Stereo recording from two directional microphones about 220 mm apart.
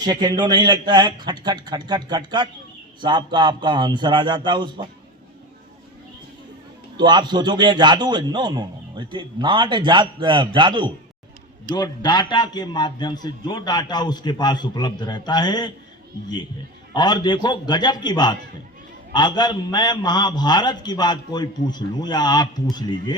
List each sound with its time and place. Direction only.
0.0 s a man's voice: 20° right (ahead or behind)
6.9 s a man's voice: 20° right (ahead or behind)
11.7 s a man's voice: 20° left (ahead or behind)
16.9 s a man's voice: 20° left (ahead or behind)